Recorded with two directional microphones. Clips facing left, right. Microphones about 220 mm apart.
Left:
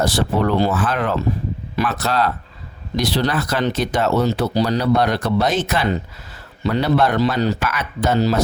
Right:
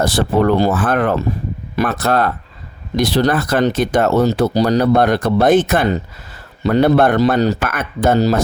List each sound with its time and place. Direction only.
0.0 s speech: 50° right (ahead or behind)